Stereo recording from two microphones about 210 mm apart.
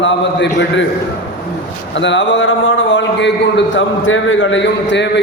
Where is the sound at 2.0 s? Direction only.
60° left (ahead or behind).